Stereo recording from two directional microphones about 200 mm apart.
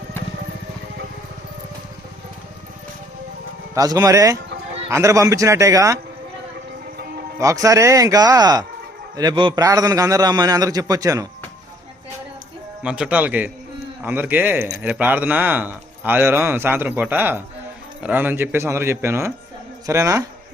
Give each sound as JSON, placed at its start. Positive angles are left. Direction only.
{"t": 3.8, "sound": "speech", "side_deg": -20}
{"t": 6.9, "sound": "music", "side_deg": -50}
{"t": 7.3, "sound": "a man's voice", "side_deg": -15}
{"t": 12.8, "sound": "speech", "side_deg": -5}